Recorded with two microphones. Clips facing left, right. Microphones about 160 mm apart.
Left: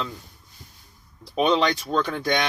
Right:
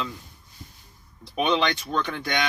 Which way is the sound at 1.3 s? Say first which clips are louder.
Left 3 dB; 30° left (ahead or behind).